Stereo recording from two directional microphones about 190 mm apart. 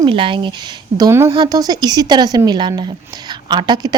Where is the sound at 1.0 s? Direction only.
15° right (ahead or behind).